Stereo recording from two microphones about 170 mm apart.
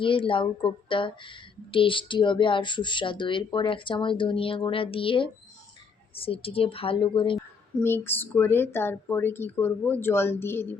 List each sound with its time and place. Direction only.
0.0 s a woman's voice: 30° left (ahead or behind)
7.3 s speech: 10° left (ahead or behind)